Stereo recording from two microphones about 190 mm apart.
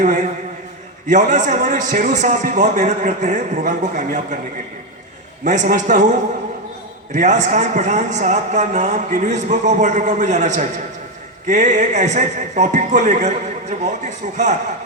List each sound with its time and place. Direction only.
0.0 s a man's voice: 40° right (ahead or behind)
5.5 s a man's voice: 40° right (ahead or behind)